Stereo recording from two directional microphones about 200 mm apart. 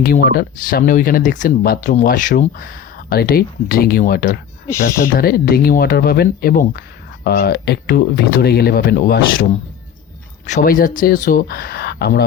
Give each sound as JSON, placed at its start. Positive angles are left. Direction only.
{"t": 0.0, "sound": "speech", "side_deg": 50}
{"t": 4.7, "sound": "speech", "side_deg": 15}
{"t": 5.0, "sound": "speech", "side_deg": 45}